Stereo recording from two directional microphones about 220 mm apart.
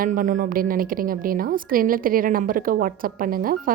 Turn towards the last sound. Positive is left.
turn(degrees=-40)  # may be behind; listen again after turning